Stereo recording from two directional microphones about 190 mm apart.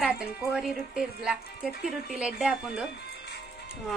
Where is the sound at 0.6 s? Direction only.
5° right (ahead or behind).